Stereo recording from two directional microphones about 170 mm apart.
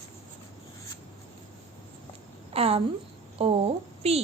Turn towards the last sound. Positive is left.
turn(degrees=-35)  # may be behind; listen again after turning